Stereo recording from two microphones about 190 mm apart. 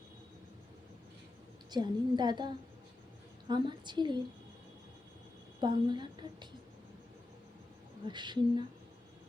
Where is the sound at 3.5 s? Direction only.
25° right (ahead or behind).